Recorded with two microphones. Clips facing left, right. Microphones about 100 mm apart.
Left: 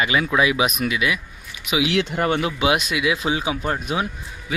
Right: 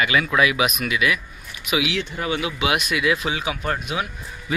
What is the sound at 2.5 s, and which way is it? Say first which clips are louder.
Speech: left 2 dB; 30° left (ahead or behind).